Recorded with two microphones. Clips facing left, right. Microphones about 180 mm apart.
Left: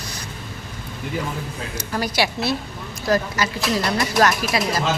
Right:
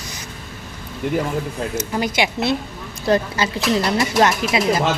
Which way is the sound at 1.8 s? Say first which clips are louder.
Right 1 dB; 20° right (ahead or behind).